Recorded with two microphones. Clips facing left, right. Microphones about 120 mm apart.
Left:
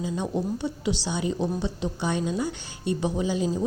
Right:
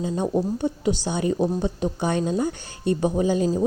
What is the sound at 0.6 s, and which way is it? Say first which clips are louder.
A woman's voice: right 4 dB; 50° right (ahead or behind).